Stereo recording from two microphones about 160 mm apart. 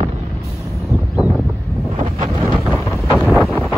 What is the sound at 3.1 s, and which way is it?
Wind noise, 5° right (ahead or behind).